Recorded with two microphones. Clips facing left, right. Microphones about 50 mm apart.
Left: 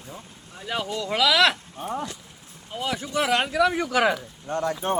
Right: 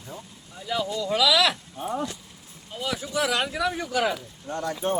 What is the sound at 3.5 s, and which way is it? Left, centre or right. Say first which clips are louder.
Speech: left 5 dB; left.